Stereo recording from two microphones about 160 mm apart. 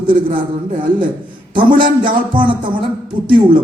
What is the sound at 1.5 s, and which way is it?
A man's voice, 30° right (ahead or behind).